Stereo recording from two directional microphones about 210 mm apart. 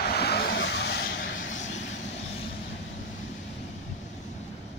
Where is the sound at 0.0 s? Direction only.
50° left (ahead or behind).